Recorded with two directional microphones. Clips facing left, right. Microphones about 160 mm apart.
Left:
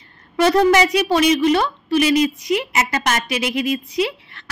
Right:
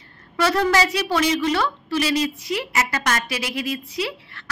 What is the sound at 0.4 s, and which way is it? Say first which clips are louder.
A woman's voice: left 5 dB; 20° left (ahead or behind).